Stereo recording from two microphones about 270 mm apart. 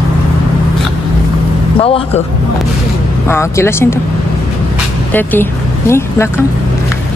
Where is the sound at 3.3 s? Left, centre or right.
Centre.